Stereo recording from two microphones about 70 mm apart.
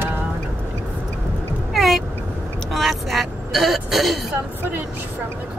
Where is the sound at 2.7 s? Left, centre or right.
Centre.